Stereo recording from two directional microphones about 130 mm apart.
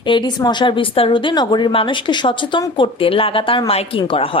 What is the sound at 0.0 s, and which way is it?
A woman's voice, 35° left (ahead or behind).